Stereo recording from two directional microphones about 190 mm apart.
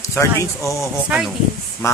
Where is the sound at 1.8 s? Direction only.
15° left (ahead or behind).